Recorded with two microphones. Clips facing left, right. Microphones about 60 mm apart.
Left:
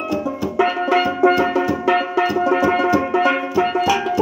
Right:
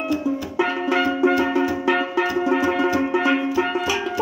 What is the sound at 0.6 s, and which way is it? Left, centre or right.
Music, left.